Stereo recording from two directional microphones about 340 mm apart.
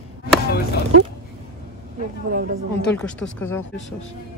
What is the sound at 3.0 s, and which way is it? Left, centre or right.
Speech, centre.